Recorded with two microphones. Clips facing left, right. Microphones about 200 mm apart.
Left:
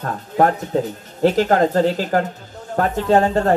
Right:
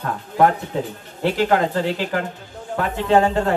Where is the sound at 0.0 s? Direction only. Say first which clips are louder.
Even; 40° left (ahead or behind).